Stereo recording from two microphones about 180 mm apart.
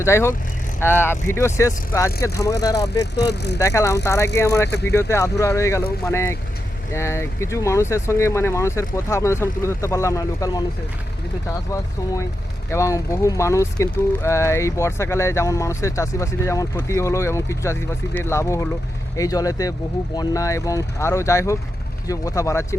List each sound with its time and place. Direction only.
0.0 s speech: 15° left (ahead or behind)
3.2 s speech: 70° left (ahead or behind)
3.6 s speech: 15° left (ahead or behind)
12.7 s speech: 15° left (ahead or behind)